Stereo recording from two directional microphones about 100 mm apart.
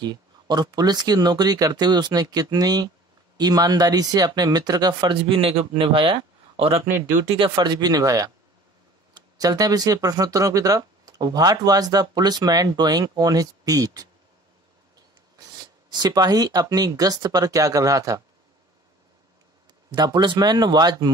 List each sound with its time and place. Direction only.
0.0 s speech: 45° right (ahead or behind)
5.2 s speech: 65° right (ahead or behind)
7.3 s speech: 50° right (ahead or behind)
15.9 s speech: 45° right (ahead or behind)
19.9 s speech: 50° right (ahead or behind)